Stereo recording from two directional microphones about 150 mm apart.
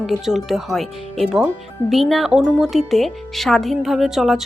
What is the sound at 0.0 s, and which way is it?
Speech, centre (ahead or behind).